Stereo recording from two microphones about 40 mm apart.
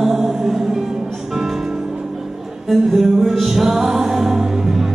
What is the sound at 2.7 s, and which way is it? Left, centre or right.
Music, centre.